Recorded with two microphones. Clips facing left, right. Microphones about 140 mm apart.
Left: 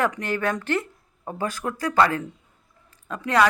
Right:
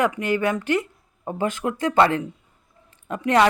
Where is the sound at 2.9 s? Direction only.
25° right (ahead or behind).